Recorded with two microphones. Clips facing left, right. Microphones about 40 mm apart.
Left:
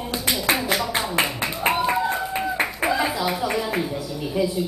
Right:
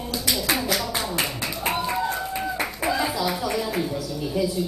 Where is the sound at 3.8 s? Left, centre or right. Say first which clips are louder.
Even; centre.